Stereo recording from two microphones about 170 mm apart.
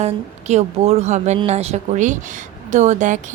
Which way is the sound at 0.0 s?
40° right (ahead or behind).